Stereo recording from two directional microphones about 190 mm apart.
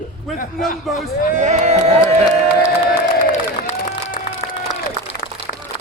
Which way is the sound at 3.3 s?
40° left (ahead or behind).